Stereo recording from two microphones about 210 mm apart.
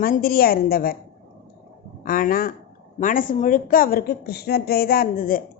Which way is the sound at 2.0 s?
40° left (ahead or behind).